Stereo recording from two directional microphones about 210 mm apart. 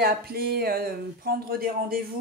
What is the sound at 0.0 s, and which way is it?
Speech, 45° right (ahead or behind).